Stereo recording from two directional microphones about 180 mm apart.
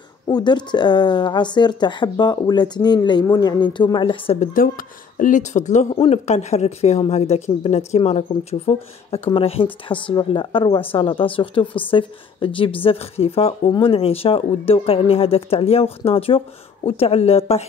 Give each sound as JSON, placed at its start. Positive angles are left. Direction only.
{"t": 0.3, "sound": "speech", "side_deg": 25}
{"t": 4.6, "sound": "speech", "side_deg": 50}